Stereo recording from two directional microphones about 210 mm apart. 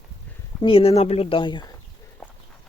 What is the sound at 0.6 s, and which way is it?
Speech, 25° left (ahead or behind).